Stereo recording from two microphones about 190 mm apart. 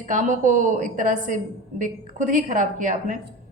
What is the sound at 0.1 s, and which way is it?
A woman's voice, 40° right (ahead or behind).